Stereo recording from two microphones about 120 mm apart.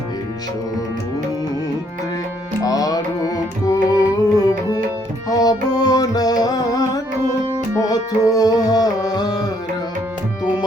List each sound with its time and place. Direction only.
2.6 s music: 30° left (ahead or behind)